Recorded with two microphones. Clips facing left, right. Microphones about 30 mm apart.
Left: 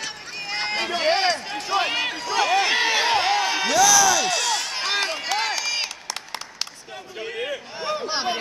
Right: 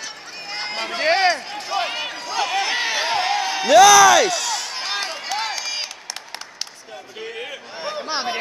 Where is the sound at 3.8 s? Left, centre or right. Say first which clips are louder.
Right 8 dB; right.